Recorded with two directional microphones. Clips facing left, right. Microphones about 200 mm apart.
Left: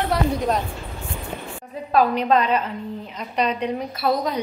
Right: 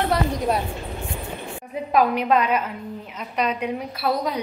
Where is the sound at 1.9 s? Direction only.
10° right (ahead or behind).